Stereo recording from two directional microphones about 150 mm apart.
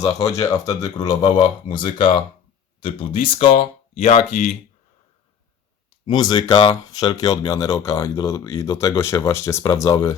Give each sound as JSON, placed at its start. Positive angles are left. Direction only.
{"t": 0.3, "sound": "speech", "side_deg": 20}
{"t": 6.1, "sound": "speech", "side_deg": 25}